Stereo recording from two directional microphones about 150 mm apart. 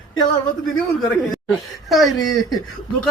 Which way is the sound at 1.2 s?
Centre (ahead or behind).